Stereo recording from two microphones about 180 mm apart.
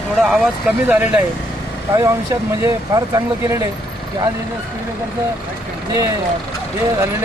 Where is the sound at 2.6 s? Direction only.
20° right (ahead or behind).